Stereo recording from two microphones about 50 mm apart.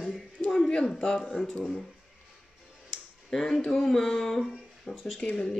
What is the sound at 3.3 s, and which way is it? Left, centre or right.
Speech, centre.